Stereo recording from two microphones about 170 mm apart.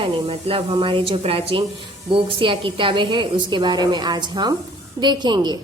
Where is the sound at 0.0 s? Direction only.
35° right (ahead or behind).